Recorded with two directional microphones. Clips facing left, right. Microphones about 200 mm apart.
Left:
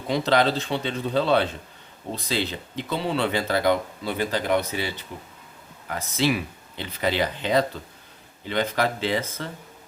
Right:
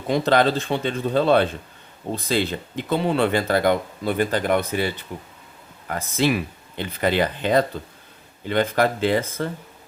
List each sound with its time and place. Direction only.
0.1 s speech: 50° right (ahead or behind)
5.9 s speech: 50° right (ahead or behind)